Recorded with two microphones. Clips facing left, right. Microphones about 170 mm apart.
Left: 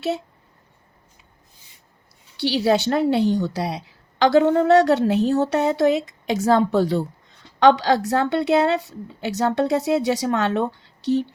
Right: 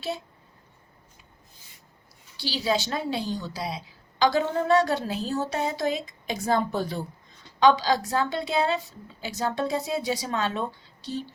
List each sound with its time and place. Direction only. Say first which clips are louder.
2.3 s a woman's voice: left 8 dB; 65° left (ahead or behind)